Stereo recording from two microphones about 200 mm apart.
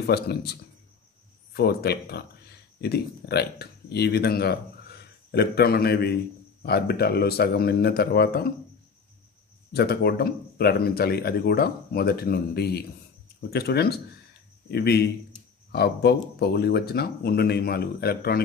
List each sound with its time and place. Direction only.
0.0 s speech: 55° left (ahead or behind)
9.7 s speech: 50° left (ahead or behind)